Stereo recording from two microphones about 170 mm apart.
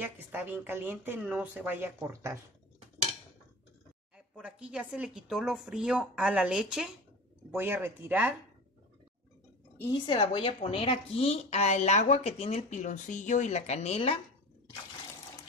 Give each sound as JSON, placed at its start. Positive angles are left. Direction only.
{"t": 0.0, "sound": "speech", "side_deg": -10}
{"t": 4.4, "sound": "a woman's voice", "side_deg": -5}
{"t": 10.0, "sound": "a woman's voice", "side_deg": 30}